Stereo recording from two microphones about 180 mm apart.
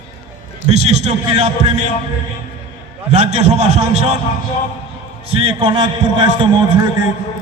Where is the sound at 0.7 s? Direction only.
40° right (ahead or behind).